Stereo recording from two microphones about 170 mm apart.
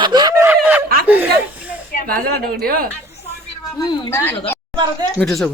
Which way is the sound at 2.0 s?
60° right (ahead or behind).